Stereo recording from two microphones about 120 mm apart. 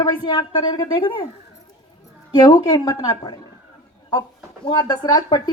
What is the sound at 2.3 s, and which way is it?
Speech, 35° left (ahead or behind).